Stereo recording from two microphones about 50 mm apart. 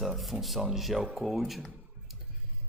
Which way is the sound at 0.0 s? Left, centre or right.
Centre.